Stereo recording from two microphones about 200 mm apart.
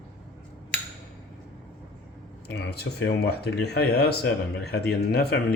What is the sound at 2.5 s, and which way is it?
Speech, 55° left (ahead or behind).